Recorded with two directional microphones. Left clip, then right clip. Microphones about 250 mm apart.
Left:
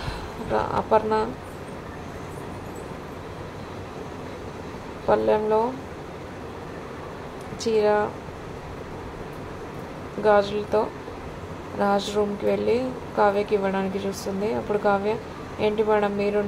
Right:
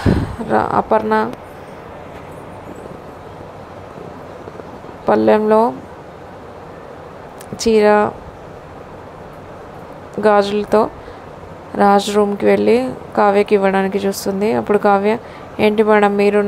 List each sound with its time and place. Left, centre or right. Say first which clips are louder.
0.0 s speech: right 13 dB; right
5.0 s a woman's voice: right 8 dB; right
7.5 s a woman's voice: right 9 dB; right
10.2 s a woman's voice: right 7 dB; right